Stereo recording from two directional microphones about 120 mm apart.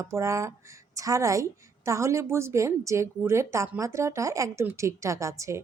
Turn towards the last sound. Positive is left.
turn(degrees=-25)  # may be behind; listen again after turning